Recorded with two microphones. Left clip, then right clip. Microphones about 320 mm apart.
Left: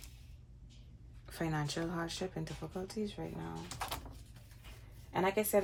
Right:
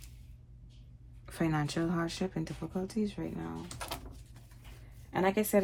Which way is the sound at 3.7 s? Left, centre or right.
Centre.